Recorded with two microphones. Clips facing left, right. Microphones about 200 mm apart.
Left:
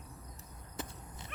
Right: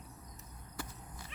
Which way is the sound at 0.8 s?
20° left (ahead or behind).